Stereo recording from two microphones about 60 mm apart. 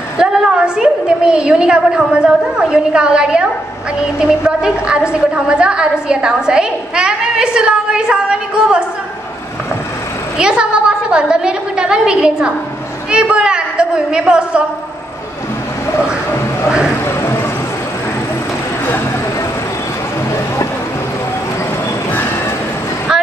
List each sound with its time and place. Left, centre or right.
0.2 s a woman's voice: centre
10.3 s a woman's voice: centre